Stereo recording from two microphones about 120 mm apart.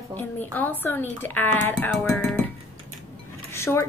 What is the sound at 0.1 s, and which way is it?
A woman's voice, 15° left (ahead or behind).